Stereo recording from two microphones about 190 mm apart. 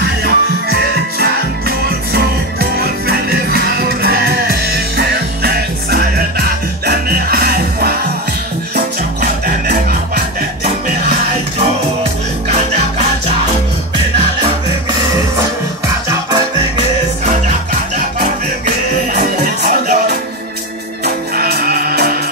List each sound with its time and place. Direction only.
0.0 s music: 55° right (ahead or behind)
1.9 s music: 55° right (ahead or behind)
9.7 s music: 55° right (ahead or behind)
11.5 s music: 35° right (ahead or behind)
19.1 s music: 50° right (ahead or behind)
21.0 s music: 55° right (ahead or behind)